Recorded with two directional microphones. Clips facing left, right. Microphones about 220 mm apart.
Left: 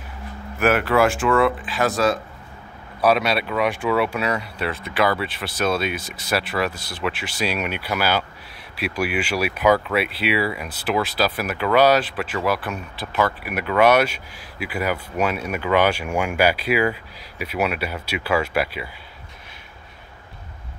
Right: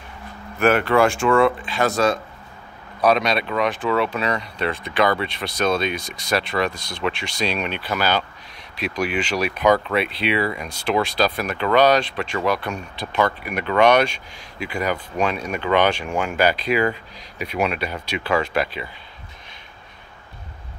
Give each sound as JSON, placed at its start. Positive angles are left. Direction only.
{"t": 0.6, "sound": "speech", "side_deg": 5}